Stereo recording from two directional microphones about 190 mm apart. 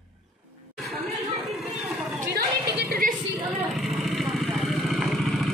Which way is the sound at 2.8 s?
50° right (ahead or behind).